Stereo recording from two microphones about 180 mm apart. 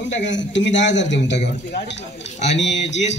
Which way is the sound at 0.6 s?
85° left.